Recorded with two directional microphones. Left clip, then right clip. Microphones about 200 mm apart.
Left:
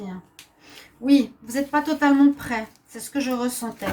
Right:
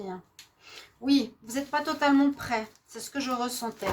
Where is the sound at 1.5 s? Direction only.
50° right (ahead or behind).